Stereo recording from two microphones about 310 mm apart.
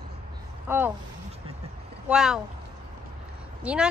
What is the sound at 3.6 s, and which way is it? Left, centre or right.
Speech, centre.